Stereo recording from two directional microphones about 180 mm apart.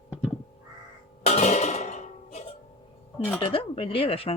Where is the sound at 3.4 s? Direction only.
30° left (ahead or behind).